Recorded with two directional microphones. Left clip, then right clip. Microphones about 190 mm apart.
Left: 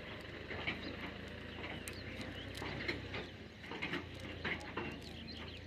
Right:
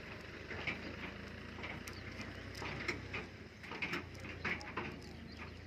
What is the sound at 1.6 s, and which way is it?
Mechanisms, 35° left (ahead or behind).